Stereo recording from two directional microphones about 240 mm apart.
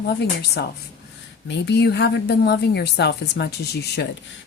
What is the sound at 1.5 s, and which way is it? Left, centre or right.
Speech, left.